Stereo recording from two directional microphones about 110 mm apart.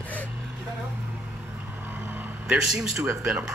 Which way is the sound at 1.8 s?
15° right (ahead or behind).